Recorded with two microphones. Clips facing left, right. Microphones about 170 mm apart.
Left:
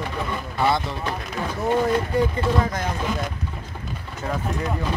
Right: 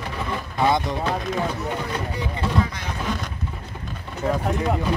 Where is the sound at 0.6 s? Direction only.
15° right (ahead or behind).